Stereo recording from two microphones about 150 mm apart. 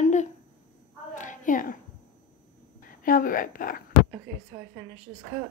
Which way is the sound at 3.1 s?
70° left (ahead or behind).